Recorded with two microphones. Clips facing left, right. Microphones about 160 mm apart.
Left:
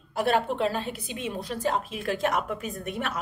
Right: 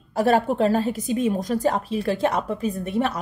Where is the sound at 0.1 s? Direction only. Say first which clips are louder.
Right 5 dB; 40° right (ahead or behind).